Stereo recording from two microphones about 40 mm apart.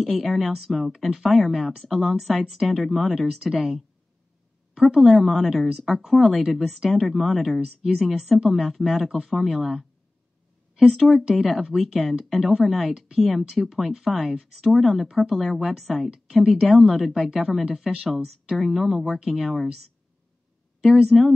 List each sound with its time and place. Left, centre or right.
0.0 s speech: centre
4.8 s speech: centre
16.4 s speech: centre
17.6 s speech: centre
19.0 s speech: centre
20.8 s speech: centre